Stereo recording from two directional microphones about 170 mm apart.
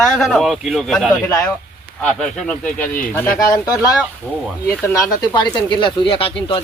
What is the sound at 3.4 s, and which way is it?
Speech, 20° left (ahead or behind).